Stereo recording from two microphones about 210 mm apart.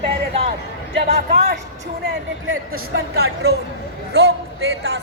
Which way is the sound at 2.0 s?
60° right (ahead or behind).